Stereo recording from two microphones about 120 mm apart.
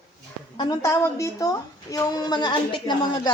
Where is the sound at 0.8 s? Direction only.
25° left (ahead or behind); by 3.3 s 40° left (ahead or behind).